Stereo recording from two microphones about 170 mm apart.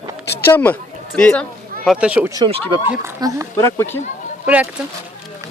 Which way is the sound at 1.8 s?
5° right (ahead or behind).